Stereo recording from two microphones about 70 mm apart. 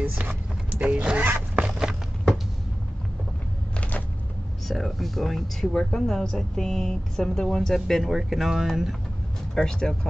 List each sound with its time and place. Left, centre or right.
0.0 s zipper: right
1.6 s walk: centre
4.6 s speech: centre
9.6 s speech: centre